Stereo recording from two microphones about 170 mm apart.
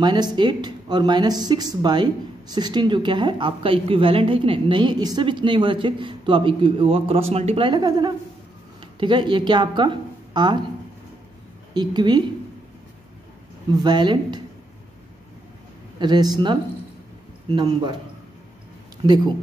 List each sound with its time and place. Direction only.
0.0 s speech: 25° right (ahead or behind)
11.7 s speech: 25° right (ahead or behind)
13.8 s speech: 25° right (ahead or behind)
16.0 s speech: 25° right (ahead or behind)
17.6 s speech: 25° right (ahead or behind)